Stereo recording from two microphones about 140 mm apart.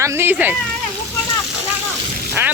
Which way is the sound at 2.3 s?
15° right (ahead or behind).